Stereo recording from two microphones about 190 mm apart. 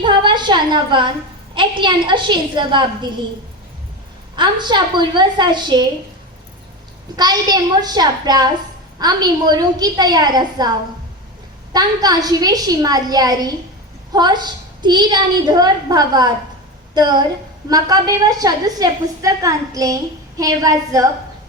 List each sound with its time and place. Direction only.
0.0 s a woman's voice: 25° right (ahead or behind)
4.4 s a woman's voice: 25° right (ahead or behind)
7.2 s a woman's voice: 20° right (ahead or behind)
11.7 s a woman's voice: 20° right (ahead or behind)